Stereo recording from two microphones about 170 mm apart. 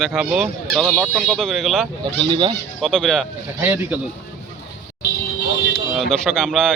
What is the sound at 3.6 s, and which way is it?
Speech, 10° right (ahead or behind).